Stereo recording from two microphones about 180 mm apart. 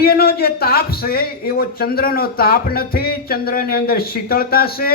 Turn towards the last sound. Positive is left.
turn(degrees=55)  # may be behind; listen again after turning